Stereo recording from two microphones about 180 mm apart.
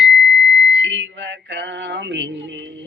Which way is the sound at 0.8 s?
90° right.